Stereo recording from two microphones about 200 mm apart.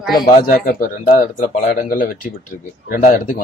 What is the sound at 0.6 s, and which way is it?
Speech, 35° left (ahead or behind).